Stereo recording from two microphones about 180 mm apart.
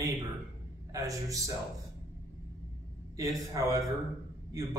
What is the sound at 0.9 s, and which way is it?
Speech, 20° right (ahead or behind).